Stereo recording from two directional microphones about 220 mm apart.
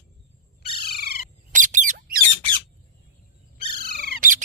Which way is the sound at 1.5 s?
35° right (ahead or behind).